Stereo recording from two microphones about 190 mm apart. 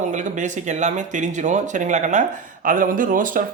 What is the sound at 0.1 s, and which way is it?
Speech, 40° right (ahead or behind).